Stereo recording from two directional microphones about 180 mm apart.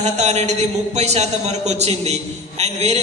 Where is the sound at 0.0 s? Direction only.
40° right (ahead or behind).